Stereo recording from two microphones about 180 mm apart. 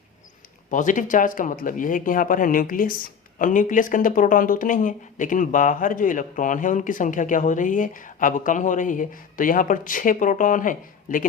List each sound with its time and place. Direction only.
0.7 s speech: 45° left (ahead or behind)